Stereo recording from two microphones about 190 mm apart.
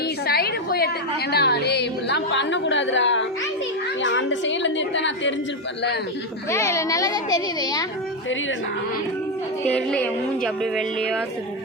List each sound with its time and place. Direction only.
0.3 s a sound: 55° left (ahead or behind)
1.3 s a woman's voice: 60° left (ahead or behind)
6.5 s a child's voice: 15° left (ahead or behind)
9.6 s a woman's voice: 5° left (ahead or behind)